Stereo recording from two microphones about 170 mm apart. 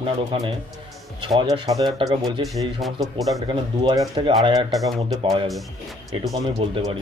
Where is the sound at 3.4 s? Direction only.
25° right (ahead or behind).